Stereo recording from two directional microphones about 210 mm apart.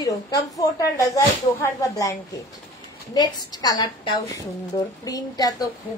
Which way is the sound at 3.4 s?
20° left (ahead or behind).